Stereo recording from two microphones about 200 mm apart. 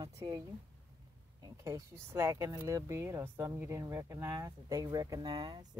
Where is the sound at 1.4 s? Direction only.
15° right (ahead or behind).